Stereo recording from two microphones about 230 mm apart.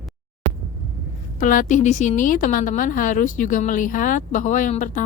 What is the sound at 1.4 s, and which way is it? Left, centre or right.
A woman's voice, left.